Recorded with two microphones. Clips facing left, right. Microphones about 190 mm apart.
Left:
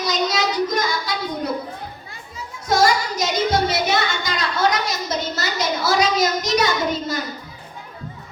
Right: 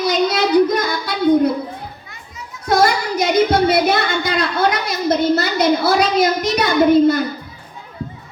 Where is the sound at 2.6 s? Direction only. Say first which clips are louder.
Right 2 dB; 60° right (ahead or behind).